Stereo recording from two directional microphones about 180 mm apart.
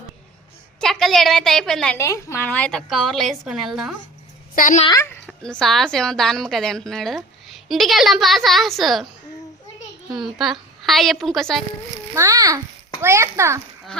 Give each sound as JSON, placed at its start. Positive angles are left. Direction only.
{"t": 0.8, "sound": "a woman's voice", "side_deg": 0}
{"t": 2.0, "sound": "a woman's voice", "side_deg": 15}
{"t": 4.5, "sound": "a woman's voice", "side_deg": 45}
{"t": 4.9, "sound": "speech", "side_deg": 15}
{"t": 5.2, "sound": "a woman's voice", "side_deg": 5}
{"t": 10.1, "sound": "a woman's voice", "side_deg": 0}
{"t": 12.1, "sound": "a child's voice", "side_deg": -15}